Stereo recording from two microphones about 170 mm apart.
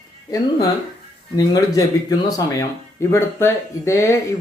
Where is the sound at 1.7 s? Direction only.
20° left (ahead or behind).